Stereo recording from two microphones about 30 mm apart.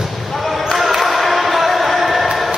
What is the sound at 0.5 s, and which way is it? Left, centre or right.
Basketball bounce, centre.